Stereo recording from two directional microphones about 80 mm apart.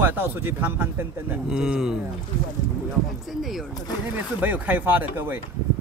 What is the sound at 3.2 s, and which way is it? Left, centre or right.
Speech, centre.